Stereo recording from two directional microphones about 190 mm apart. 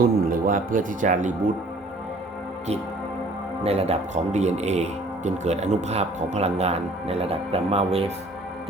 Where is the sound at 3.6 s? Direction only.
35° right (ahead or behind).